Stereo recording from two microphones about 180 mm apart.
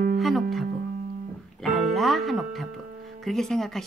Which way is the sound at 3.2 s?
Centre (ahead or behind).